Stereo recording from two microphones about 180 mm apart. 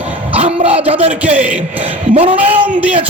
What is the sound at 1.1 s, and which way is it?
Speech, 10° right (ahead or behind).